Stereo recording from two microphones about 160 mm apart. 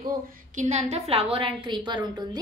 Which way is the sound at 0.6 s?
45° right (ahead or behind).